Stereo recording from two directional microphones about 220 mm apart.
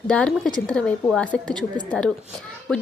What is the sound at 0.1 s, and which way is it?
A woman's voice, 5° left (ahead or behind).